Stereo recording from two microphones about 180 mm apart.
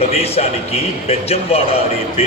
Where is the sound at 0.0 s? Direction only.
35° left (ahead or behind).